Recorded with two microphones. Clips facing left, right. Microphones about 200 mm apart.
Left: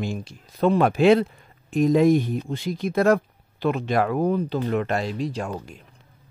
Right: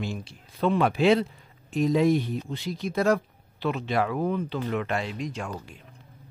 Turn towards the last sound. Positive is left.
turn(degrees=40)  # may be behind; listen again after turning